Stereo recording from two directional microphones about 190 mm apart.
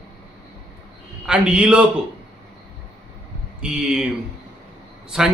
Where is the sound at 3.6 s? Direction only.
5° right (ahead or behind).